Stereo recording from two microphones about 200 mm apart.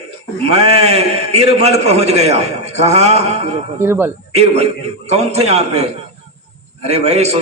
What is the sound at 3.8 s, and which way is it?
Speech, 10° right (ahead or behind).